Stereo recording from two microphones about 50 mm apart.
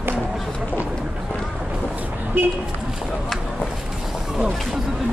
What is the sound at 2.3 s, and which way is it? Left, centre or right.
Speech, right.